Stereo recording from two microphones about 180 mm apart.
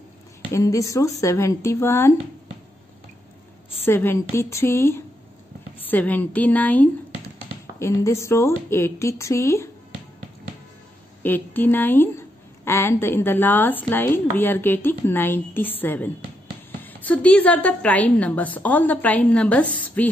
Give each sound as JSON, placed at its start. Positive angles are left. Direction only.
{"t": 0.5, "sound": "a woman's voice", "side_deg": 15}
{"t": 3.8, "sound": "a woman's voice", "side_deg": 10}
{"t": 11.2, "sound": "a woman's voice", "side_deg": 10}